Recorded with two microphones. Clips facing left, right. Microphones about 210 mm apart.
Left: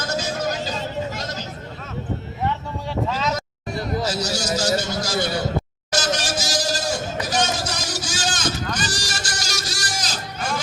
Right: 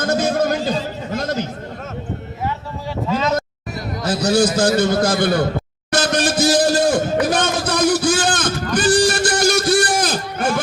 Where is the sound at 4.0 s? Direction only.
55° right (ahead or behind).